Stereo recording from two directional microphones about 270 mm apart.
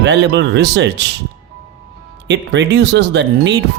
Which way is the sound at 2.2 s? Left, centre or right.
Right.